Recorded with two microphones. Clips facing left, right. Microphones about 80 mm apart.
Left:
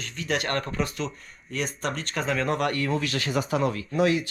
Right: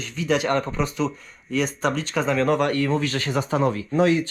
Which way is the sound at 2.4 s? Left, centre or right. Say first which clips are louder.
Right 5 dB; right.